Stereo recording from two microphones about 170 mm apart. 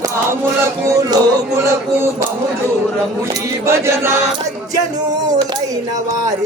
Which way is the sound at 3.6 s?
15° right (ahead or behind).